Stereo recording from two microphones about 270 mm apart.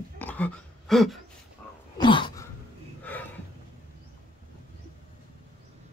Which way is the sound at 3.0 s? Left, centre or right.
Centre.